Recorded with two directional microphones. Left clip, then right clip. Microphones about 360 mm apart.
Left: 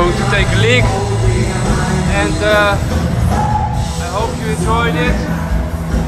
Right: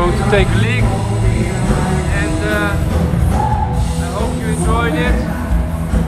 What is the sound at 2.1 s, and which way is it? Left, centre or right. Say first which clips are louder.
Music: left 9 dB; centre.